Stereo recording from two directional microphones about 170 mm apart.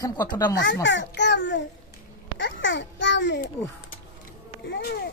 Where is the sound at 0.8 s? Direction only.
90° left.